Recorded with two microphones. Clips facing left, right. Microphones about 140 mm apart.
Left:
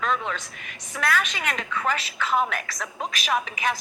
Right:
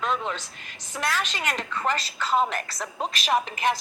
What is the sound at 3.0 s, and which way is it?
Speech, 35° right (ahead or behind).